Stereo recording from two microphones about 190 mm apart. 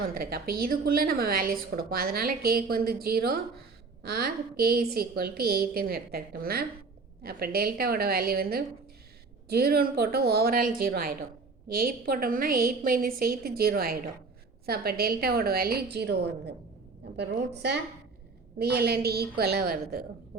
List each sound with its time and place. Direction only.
0.1 s a woman's voice: 50° right (ahead or behind)